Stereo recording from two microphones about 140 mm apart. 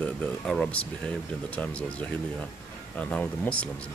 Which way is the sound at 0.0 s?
10° left (ahead or behind).